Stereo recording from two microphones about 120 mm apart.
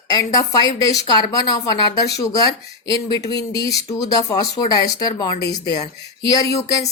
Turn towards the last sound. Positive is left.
turn(degrees=30)  # may be behind; listen again after turning